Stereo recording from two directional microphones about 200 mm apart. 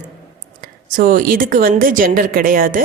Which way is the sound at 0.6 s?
45° right (ahead or behind).